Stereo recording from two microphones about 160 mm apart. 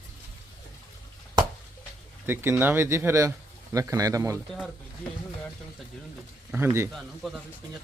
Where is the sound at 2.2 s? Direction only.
15° right (ahead or behind).